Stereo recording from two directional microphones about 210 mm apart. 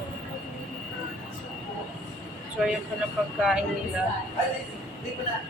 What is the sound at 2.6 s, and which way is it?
Female singing, centre (ahead or behind).